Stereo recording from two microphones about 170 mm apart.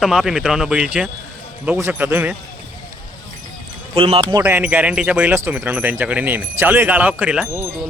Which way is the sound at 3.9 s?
30° right (ahead or behind).